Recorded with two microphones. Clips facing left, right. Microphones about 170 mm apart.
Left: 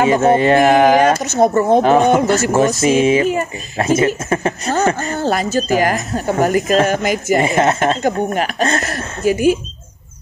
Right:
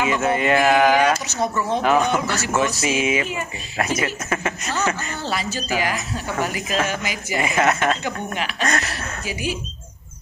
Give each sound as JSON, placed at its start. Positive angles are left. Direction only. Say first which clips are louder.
{"t": 0.0, "sound": "speech", "louder": "left 8 dB", "side_deg": 40}
{"t": 1.8, "sound": "speech", "louder": "left 5 dB", "side_deg": 35}